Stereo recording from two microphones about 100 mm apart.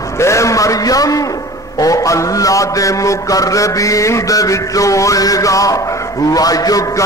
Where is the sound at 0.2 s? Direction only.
30° left (ahead or behind).